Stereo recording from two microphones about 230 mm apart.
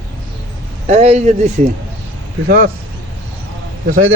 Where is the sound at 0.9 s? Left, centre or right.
Right.